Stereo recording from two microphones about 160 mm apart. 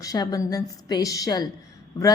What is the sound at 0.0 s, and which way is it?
A woman's voice, 25° left (ahead or behind).